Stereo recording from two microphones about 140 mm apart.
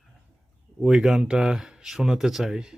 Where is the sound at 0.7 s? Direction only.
Centre (ahead or behind).